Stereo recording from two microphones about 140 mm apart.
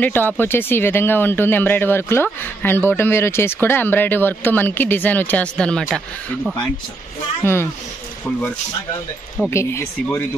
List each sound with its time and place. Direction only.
0.0 s speech: 15° left (ahead or behind)
7.4 s speech: 15° left (ahead or behind)
9.5 s speech: 20° left (ahead or behind)